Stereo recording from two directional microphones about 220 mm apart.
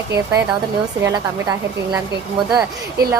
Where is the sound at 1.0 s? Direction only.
15° right (ahead or behind).